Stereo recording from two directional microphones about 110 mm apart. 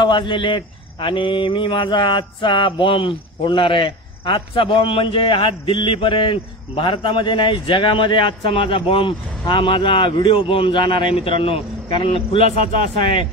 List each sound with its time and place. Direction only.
0.0 s mantra: 45° left (ahead or behind)